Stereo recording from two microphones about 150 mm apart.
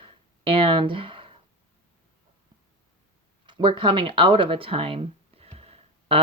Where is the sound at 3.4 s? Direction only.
30° right (ahead or behind).